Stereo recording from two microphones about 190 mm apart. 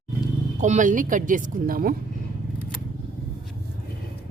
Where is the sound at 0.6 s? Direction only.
40° right (ahead or behind).